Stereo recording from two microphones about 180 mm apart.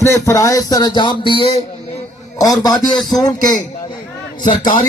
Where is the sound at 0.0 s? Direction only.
15° left (ahead or behind).